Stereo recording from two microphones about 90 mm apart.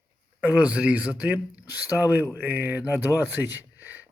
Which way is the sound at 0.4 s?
15° right (ahead or behind).